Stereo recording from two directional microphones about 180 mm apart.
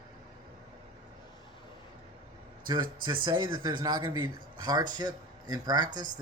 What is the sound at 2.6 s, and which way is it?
Speech, 25° right (ahead or behind).